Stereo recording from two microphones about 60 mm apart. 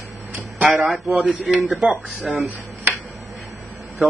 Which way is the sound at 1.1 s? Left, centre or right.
Centre.